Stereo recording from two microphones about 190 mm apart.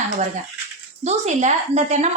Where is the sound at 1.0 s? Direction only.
40° right (ahead or behind).